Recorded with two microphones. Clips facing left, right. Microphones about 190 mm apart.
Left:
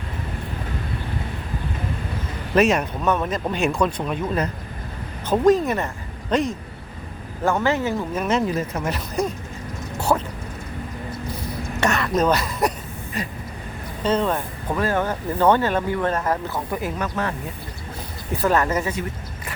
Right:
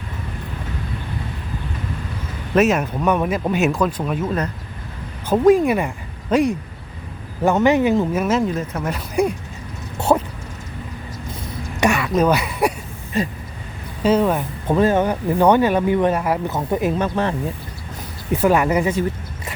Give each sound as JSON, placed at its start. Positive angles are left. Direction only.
{"t": 2.6, "sound": "speech", "side_deg": -5}
{"t": 5.3, "sound": "speech", "side_deg": -10}
{"t": 10.1, "sound": "speech", "side_deg": -20}
{"t": 11.8, "sound": "speech", "side_deg": -10}
{"t": 14.0, "sound": "speech", "side_deg": -10}
{"t": 14.7, "sound": "speech", "side_deg": -20}
{"t": 16.7, "sound": "speech", "side_deg": -25}
{"t": 18.3, "sound": "speech", "side_deg": -10}